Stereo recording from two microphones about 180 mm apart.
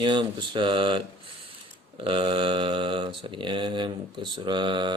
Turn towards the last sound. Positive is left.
turn(degrees=-25)  # may be behind; listen again after turning